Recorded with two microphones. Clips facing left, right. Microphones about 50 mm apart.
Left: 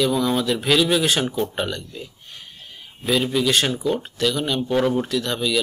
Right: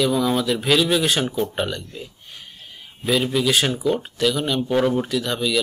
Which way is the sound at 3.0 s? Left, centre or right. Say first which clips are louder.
Even; centre.